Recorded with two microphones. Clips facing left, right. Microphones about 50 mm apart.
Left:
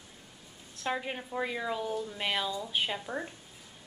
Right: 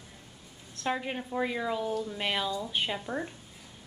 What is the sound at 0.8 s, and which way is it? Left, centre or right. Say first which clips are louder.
A woman's voice: right 2 dB; centre.